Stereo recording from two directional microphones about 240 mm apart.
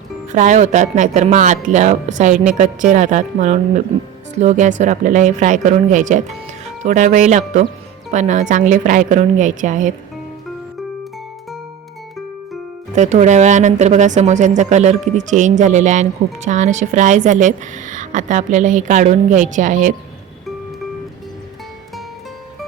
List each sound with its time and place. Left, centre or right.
0.3 s speech: right
13.0 s speech: right